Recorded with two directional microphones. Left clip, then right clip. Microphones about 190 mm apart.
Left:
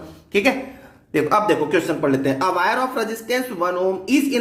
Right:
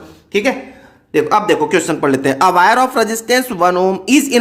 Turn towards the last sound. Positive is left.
turn(degrees=-40)  # may be behind; listen again after turning